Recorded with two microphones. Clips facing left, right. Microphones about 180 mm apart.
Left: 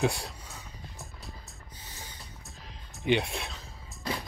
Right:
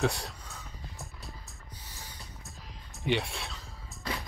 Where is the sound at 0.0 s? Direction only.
15° left (ahead or behind).